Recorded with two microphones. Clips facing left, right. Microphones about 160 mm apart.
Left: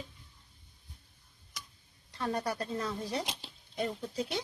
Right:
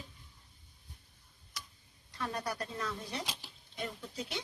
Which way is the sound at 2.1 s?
30° left (ahead or behind).